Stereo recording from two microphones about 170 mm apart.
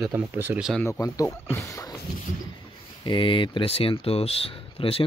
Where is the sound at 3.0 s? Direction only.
30° left (ahead or behind).